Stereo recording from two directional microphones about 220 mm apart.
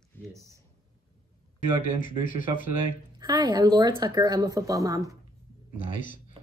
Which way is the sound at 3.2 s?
20° right (ahead or behind).